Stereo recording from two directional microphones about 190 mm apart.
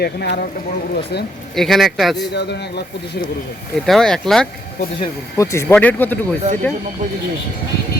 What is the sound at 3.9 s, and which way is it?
Speech, centre (ahead or behind).